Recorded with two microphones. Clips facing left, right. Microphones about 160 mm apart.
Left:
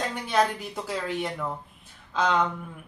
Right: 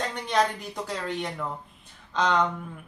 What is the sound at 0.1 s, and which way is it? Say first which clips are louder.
Speech: left 1 dB; 5° left (ahead or behind).